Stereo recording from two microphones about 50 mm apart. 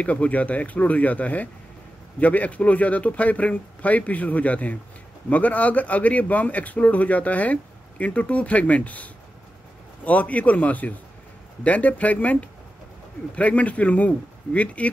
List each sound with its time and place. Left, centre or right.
0.0 s a man's voice: left